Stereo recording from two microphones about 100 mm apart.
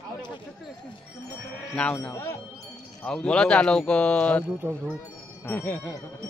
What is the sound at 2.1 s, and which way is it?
Speech, 25° left (ahead or behind).